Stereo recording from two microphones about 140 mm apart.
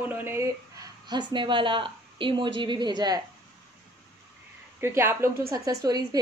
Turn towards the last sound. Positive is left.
turn(degrees=-30)  # may be behind; listen again after turning